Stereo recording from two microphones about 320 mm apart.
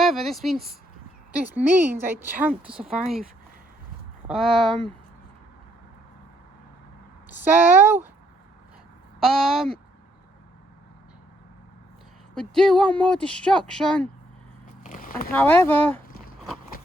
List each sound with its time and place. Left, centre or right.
0.0 s speech: centre
4.3 s speech: centre
7.3 s speech: centre
9.2 s speech: centre
12.3 s speech: centre
14.8 s a sound: left
15.3 s speech: centre